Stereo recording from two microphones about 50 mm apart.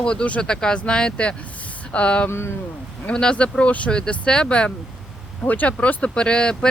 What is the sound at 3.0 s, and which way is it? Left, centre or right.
Speech, centre.